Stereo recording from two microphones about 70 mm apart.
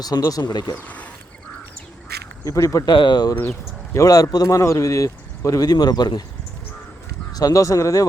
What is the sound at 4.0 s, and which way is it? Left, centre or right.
Speech, left.